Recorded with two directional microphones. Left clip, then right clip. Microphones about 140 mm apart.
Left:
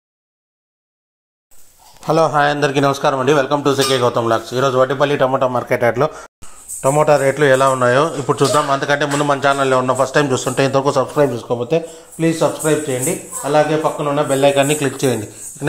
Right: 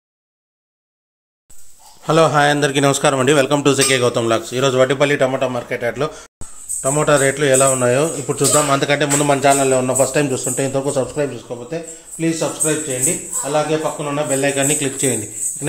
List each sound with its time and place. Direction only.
2.3 s speech: 15° right (ahead or behind)
2.7 s a man's voice: 30° right (ahead or behind)
3.8 s speech: 20° right (ahead or behind)
5.7 s speech: 20° left (ahead or behind); by 7.7 s centre (ahead or behind)
7.7 s speech: 15° right (ahead or behind)
11.5 s speech: 55° left (ahead or behind)
12.2 s speech: 20° left (ahead or behind)
15.0 s speech: 5° left (ahead or behind)